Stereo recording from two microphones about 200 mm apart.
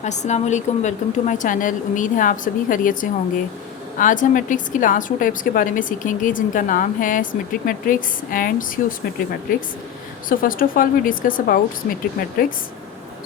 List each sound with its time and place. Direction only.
0.0 s a woman's voice: 35° left (ahead or behind)
10.2 s a woman's voice: 45° left (ahead or behind)